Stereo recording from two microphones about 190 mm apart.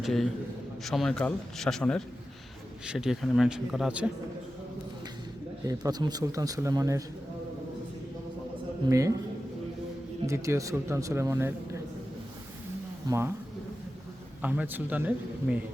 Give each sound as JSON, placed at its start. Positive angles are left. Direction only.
{"t": 0.0, "sound": "a man's voice", "side_deg": 0}
{"t": 5.6, "sound": "speech", "side_deg": -20}
{"t": 8.9, "sound": "speech", "side_deg": -15}
{"t": 10.2, "sound": "speech", "side_deg": -15}
{"t": 13.1, "sound": "speech", "side_deg": -15}
{"t": 14.4, "sound": "speech", "side_deg": -10}